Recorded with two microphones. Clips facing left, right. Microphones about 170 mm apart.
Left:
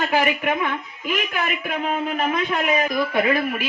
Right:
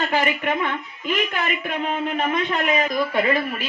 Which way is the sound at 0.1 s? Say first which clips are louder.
Left 1 dB; 10° left (ahead or behind).